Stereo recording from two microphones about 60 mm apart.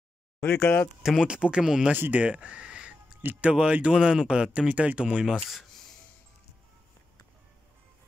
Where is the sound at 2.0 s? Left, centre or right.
Right.